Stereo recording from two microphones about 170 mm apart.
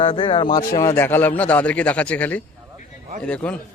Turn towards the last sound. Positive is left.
turn(degrees=5)  # may be behind; listen again after turning